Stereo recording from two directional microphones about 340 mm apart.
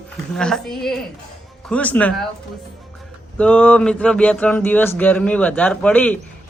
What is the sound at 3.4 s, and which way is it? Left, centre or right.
Speech, centre.